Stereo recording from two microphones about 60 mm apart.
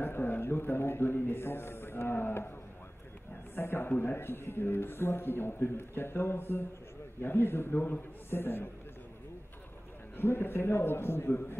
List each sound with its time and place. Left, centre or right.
0.0 s a man's voice: left
3.5 s a man's voice: left
10.1 s a man's voice: left